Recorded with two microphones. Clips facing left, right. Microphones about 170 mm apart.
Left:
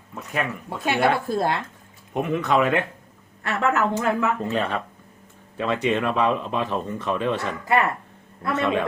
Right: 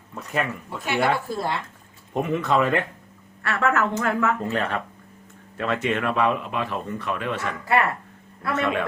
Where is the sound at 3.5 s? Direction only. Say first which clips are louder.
Left 1 dB; 15° left (ahead or behind).